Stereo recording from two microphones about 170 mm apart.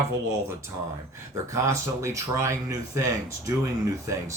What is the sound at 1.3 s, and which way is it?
Speech, 20° right (ahead or behind).